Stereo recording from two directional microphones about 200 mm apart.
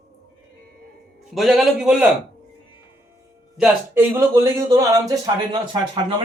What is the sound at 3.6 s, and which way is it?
A man's voice, 10° right (ahead or behind).